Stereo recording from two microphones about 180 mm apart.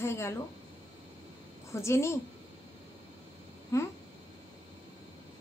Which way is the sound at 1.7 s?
15° left (ahead or behind).